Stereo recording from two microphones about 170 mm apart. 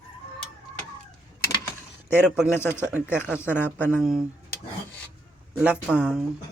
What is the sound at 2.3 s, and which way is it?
Speech, 5° right (ahead or behind).